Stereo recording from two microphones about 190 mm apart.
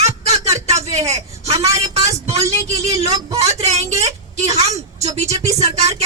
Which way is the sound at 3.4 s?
35° right (ahead or behind).